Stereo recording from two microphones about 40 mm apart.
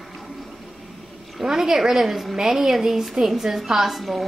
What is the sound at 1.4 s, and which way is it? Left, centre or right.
A woman's voice, centre.